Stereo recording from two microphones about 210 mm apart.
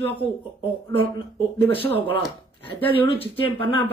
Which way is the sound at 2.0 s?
10° left (ahead or behind).